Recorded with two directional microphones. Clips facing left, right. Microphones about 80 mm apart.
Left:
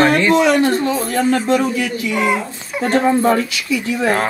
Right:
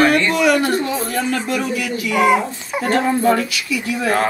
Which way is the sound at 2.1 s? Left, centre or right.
Centre.